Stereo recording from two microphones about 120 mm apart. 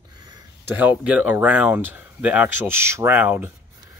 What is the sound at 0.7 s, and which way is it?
Speech, 10° right (ahead or behind).